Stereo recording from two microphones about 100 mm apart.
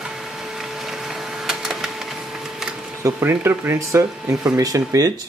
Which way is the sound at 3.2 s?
20° right (ahead or behind).